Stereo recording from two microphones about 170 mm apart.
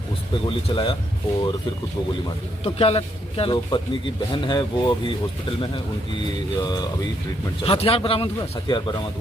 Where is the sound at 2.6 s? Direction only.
35° left (ahead or behind).